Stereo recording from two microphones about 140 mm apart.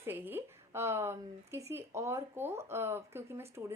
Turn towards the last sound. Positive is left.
turn(degrees=-20)  # may be behind; listen again after turning